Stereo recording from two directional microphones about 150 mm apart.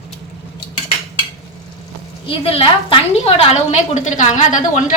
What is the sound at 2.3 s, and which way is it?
A woman's voice, 40° left (ahead or behind).